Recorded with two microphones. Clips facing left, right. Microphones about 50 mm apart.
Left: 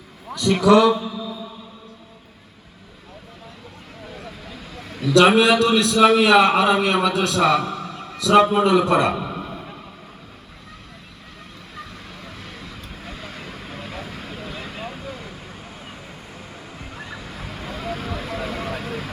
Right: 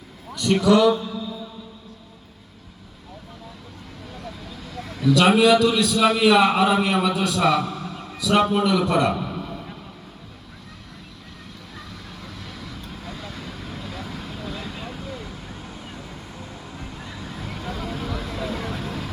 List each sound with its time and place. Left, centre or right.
0.5 s a man's voice: left
4.8 s a sound: left
5.1 s a man's voice: left
8.5 s a man's voice: left
9.3 s a sound: left
13.1 s vehicle: left
17.6 s vehicle: left